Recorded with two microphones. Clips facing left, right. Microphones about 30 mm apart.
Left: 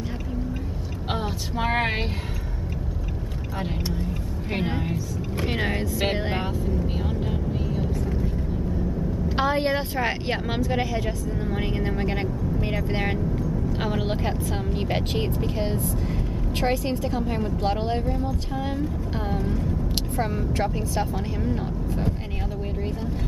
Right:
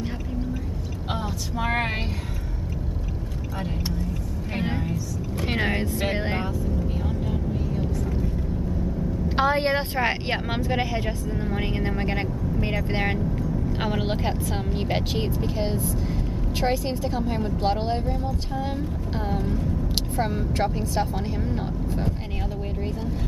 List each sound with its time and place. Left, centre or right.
1.1 s speech: left
5.5 s speech: centre
7.0 s vehicle: left
9.3 s vehicle: centre
9.6 s speech: centre
16.1 s speech: centre
20.2 s speech: centre
21.5 s vehicle: centre